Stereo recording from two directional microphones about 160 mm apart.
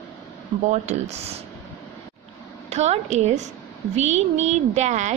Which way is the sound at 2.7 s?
45° right (ahead or behind).